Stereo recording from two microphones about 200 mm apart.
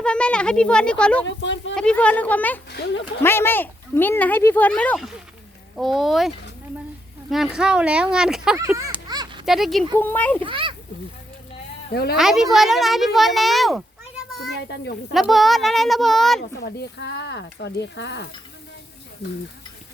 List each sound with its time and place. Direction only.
0.0 s speech: 5° left (ahead or behind)
1.3 s speech: 65° left (ahead or behind)
1.7 s speech: 5° left (ahead or behind)
2.6 s speech: 55° left (ahead or behind)
3.2 s speech: 10° left (ahead or behind)
8.5 s a sound: 15° right (ahead or behind)
9.5 s speech: centre (ahead or behind)
10.4 s a child's voice: 25° right (ahead or behind)
11.9 s a woman's voice: 50° left (ahead or behind)
12.1 s speech: centre (ahead or behind)
14.5 s speech: 55° left (ahead or behind)
15.1 s speech: centre (ahead or behind)
16.4 s speech: 55° left (ahead or behind)